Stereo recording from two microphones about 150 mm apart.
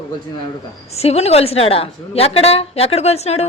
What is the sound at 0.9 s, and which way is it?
A woman's voice, 45° left (ahead or behind).